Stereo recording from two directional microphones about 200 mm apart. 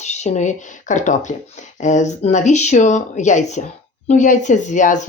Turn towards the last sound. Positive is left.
turn(degrees=40)  # may be behind; listen again after turning